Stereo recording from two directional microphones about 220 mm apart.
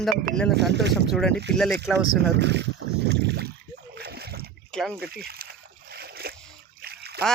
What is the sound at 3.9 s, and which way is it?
Splash, 45° right (ahead or behind).